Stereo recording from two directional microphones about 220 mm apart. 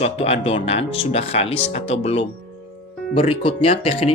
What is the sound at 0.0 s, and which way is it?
Speech, 30° left (ahead or behind).